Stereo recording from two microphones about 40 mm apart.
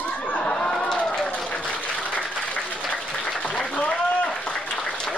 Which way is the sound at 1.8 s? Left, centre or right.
Left.